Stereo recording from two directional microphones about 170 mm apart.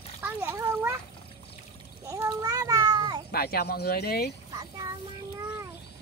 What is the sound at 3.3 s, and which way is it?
Speech, 65° left (ahead or behind).